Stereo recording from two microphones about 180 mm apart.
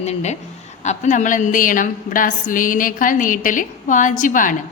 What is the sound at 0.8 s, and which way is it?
A woman's voice, 40° left (ahead or behind).